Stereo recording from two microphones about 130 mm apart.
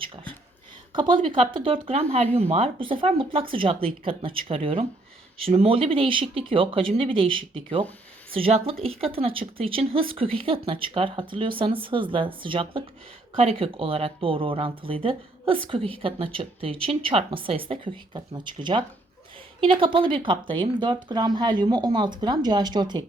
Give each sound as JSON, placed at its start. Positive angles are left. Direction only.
{"t": 0.9, "sound": "speech", "side_deg": -40}